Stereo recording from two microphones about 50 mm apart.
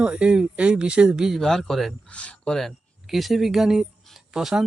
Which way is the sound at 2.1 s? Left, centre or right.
Left.